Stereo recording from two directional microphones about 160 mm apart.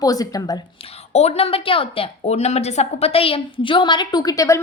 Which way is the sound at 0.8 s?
40° left (ahead or behind).